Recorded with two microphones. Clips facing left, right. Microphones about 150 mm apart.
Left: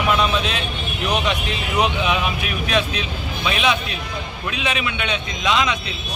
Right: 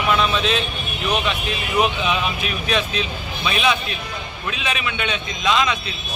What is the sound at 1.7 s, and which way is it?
Speech, 15° left (ahead or behind).